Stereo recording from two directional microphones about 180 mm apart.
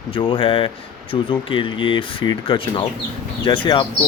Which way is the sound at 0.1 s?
30° left (ahead or behind).